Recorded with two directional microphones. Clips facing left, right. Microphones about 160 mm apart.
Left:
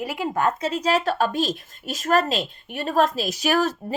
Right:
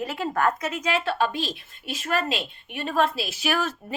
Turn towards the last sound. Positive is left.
turn(degrees=40)  # may be behind; listen again after turning